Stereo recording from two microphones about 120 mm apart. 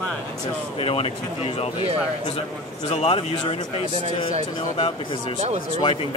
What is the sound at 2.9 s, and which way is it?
Speech, 55° left (ahead or behind).